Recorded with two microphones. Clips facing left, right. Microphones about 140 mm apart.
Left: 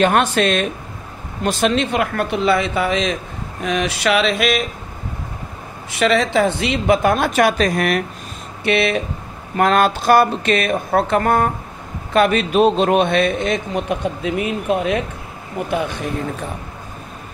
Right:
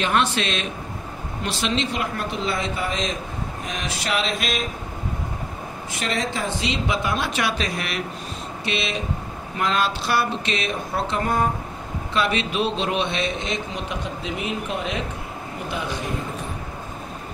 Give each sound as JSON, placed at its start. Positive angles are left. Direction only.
{"t": 0.0, "sound": "a man's voice", "side_deg": 50}
{"t": 3.6, "sound": "a sound", "side_deg": 75}
{"t": 5.9, "sound": "a man's voice", "side_deg": 80}
{"t": 12.1, "sound": "a man's voice", "side_deg": 50}